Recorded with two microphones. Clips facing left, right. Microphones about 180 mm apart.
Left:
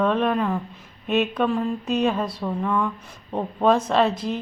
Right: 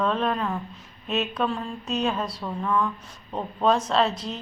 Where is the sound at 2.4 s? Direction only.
45° left (ahead or behind).